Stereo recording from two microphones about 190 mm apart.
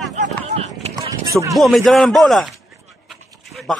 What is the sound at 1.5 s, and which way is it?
A man's voice, centre (ahead or behind).